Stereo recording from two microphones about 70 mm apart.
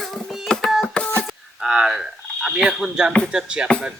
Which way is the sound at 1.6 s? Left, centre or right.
Centre.